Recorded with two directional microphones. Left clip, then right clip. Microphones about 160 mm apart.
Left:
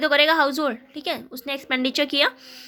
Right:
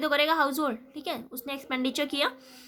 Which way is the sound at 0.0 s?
20° left (ahead or behind).